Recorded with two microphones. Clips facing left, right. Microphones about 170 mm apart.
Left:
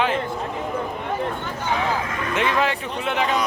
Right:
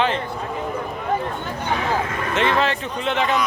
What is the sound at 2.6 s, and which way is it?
Speech, 10° left (ahead or behind).